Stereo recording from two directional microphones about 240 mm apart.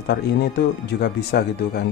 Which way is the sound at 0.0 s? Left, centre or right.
Left.